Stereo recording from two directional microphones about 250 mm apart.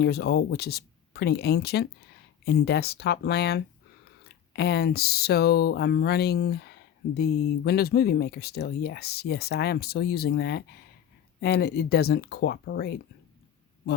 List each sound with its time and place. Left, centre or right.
0.0 s speech: left